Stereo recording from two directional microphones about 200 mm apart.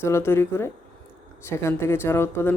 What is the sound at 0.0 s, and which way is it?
Speech, 10° left (ahead or behind).